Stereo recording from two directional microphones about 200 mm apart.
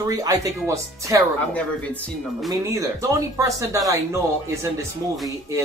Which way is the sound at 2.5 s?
15° right (ahead or behind).